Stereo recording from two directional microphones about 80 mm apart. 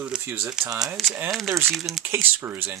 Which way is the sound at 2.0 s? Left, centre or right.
Right.